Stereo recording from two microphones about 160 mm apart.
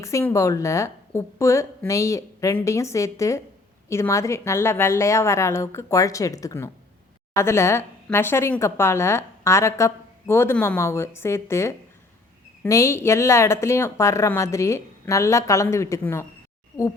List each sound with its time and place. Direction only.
0.0 s a woman's voice: 15° left (ahead or behind)